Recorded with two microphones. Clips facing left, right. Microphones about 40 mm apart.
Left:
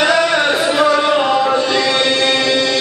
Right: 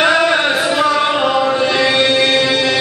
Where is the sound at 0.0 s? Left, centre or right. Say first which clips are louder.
Right 1 dB; centre.